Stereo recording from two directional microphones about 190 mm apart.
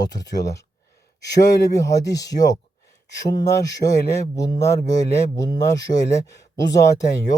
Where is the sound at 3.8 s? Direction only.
35° left (ahead or behind).